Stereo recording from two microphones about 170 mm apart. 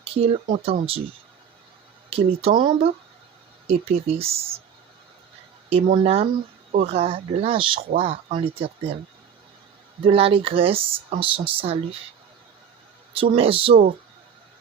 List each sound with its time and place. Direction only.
0.0 s speech: 35° right (ahead or behind)
2.0 s speech: 35° right (ahead or behind)
5.6 s speech: 30° right (ahead or behind)
10.0 s speech: 35° right (ahead or behind)
13.1 s speech: 35° right (ahead or behind)